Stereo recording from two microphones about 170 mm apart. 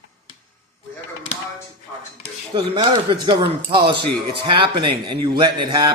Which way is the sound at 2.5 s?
30° right (ahead or behind).